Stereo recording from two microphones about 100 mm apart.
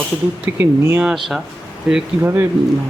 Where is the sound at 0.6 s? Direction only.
20° right (ahead or behind).